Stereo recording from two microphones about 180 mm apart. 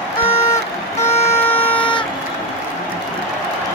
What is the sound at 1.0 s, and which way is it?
Vehicle, 15° left (ahead or behind).